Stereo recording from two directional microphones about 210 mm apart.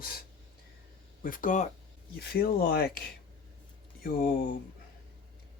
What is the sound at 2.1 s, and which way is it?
Speech, 50° left (ahead or behind).